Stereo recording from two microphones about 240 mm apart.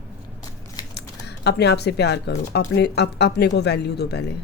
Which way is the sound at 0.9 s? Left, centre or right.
Left.